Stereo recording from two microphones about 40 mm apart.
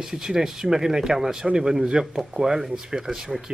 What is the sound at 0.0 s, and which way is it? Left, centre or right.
Speech, centre.